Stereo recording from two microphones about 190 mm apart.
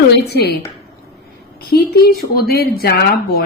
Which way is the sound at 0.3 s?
55° left (ahead or behind).